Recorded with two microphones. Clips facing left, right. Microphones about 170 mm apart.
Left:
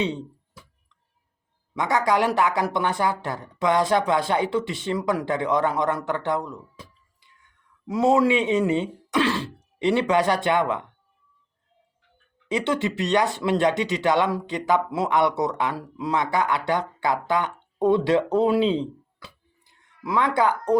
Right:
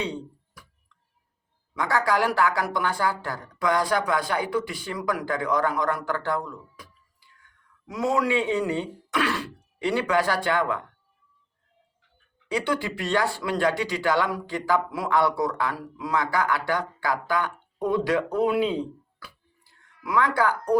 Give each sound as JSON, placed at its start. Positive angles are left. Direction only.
{"t": 0.0, "sound": "a sound", "side_deg": 20}
{"t": 1.7, "sound": "speech", "side_deg": 20}
{"t": 12.5, "sound": "speech", "side_deg": 20}